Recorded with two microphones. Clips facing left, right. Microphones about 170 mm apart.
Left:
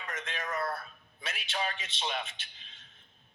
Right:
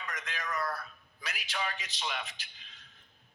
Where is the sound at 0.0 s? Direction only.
25° left (ahead or behind).